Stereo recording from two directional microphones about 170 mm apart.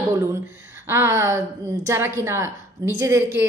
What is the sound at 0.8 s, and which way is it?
A woman's voice, 15° right (ahead or behind).